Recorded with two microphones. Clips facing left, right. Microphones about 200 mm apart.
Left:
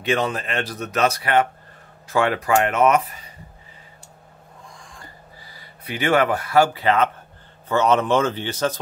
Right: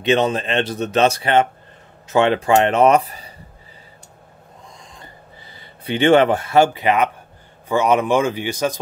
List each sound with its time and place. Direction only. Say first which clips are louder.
0.0 s speech: right 5 dB; 25° right (ahead or behind)
4.7 s a sound: right 1 dB; 20° right (ahead or behind)
5.5 s a man's voice: right 8 dB; 25° right (ahead or behind)